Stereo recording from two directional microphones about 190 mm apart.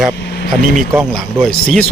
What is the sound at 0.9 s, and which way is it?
Speech, centre (ahead or behind).